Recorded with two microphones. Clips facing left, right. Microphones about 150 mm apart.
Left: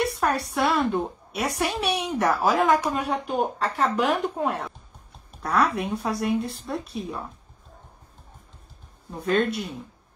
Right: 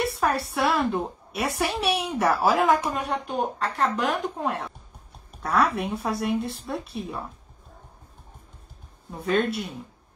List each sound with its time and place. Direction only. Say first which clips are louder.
0.0 s a woman's voice: even; centre (ahead or behind)
9.2 s a woman's voice: left 1 dB; centre (ahead or behind)